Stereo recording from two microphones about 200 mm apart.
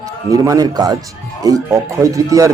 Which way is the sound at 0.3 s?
15° right (ahead or behind).